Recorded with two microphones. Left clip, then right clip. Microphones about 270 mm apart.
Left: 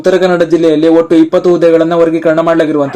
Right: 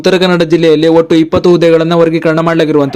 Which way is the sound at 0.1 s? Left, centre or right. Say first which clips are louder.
Left 2 dB; right.